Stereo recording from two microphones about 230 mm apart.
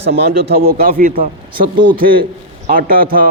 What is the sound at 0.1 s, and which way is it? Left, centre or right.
A man's voice, right.